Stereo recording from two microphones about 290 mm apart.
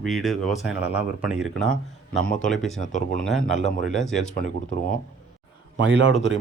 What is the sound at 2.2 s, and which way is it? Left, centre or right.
Speech, left.